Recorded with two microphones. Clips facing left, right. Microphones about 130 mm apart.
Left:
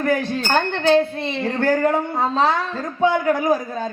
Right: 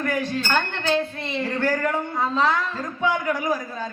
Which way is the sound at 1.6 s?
30° left (ahead or behind).